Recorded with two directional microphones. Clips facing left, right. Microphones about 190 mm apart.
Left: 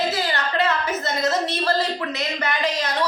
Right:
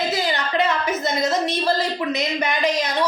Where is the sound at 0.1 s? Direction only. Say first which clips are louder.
Right 2 dB; 15° right (ahead or behind).